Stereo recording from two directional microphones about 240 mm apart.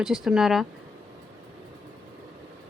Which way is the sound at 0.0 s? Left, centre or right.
Centre.